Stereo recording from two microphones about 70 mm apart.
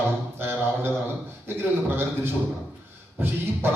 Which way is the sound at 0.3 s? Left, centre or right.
Right.